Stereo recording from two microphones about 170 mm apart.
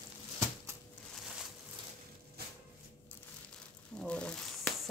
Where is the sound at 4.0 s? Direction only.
5° left (ahead or behind).